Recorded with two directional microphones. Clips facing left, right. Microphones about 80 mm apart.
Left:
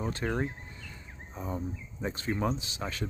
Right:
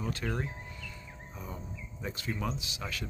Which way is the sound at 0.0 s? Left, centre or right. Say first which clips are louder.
Left 4 dB; left.